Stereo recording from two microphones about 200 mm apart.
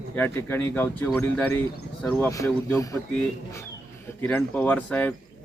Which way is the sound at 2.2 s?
15° left (ahead or behind).